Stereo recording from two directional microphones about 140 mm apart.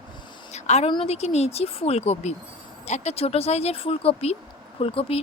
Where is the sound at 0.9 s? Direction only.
40° left (ahead or behind).